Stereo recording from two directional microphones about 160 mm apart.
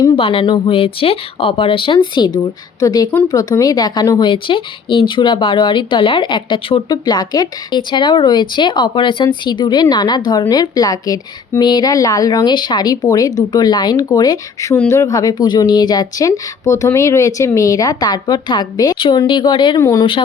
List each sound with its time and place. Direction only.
0.2 s speech: 35° left (ahead or behind)